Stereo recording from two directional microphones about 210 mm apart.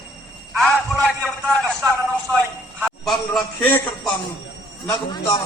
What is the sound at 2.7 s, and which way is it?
A man's voice, 5° right (ahead or behind).